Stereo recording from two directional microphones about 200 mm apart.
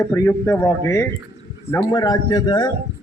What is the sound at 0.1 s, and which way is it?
A man's voice, 15° left (ahead or behind).